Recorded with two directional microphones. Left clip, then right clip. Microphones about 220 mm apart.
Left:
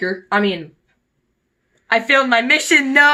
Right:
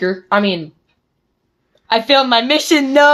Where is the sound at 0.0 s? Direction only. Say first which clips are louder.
Right 3 dB; 40° right (ahead or behind).